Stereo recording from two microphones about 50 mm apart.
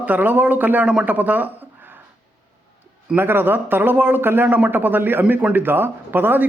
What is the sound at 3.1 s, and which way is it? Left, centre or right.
Speech, right.